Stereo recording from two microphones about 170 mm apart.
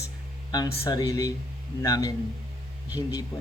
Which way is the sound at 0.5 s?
25° left (ahead or behind).